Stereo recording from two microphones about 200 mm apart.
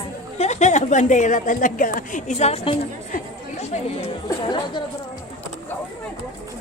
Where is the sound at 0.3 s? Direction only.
35° left (ahead or behind).